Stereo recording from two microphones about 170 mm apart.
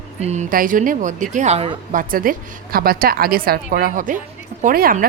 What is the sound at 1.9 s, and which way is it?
A woman's voice, 55° right (ahead or behind).